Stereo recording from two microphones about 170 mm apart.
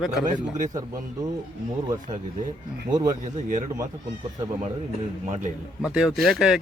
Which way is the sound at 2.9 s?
20° right (ahead or behind).